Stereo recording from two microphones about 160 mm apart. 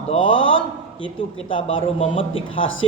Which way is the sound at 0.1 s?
35° left (ahead or behind).